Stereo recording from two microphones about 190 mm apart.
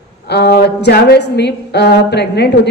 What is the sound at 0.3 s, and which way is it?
A woman's voice, 60° left (ahead or behind).